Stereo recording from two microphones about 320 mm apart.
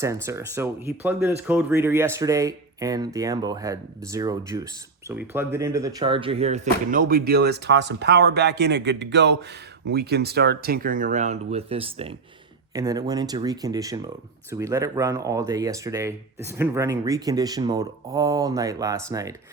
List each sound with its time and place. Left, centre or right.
0.0 s speech: centre